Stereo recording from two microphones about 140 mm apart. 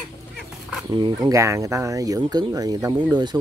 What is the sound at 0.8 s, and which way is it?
Speech, 30° right (ahead or behind).